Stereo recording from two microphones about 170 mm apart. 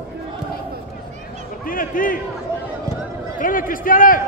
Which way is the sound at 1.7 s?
55° left (ahead or behind).